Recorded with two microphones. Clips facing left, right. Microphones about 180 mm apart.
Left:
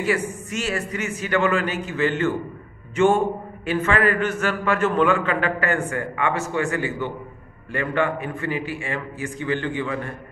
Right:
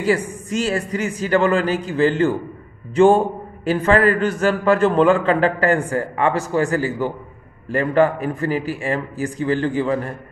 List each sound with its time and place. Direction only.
0.5 s a man's voice: 30° right (ahead or behind)